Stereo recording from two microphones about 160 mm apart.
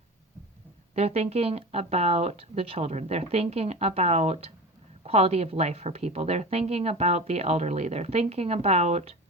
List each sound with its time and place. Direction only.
0.9 s a woman's voice: 40° right (ahead or behind)